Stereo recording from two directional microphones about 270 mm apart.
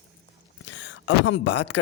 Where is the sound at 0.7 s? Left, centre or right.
Left.